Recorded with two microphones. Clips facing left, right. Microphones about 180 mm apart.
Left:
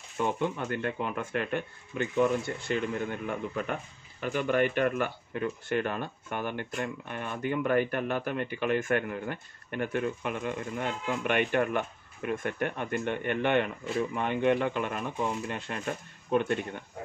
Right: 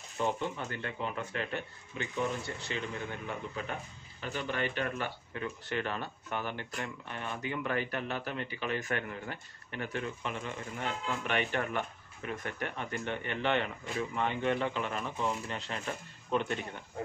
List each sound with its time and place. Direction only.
0.2 s speech: 55° left (ahead or behind)